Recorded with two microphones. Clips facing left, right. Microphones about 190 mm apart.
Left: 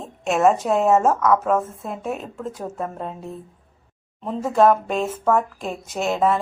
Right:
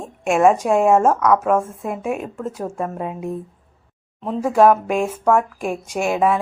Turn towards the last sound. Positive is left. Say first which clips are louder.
# right 2 dB
turn(degrees=-10)  # may be behind; listen again after turning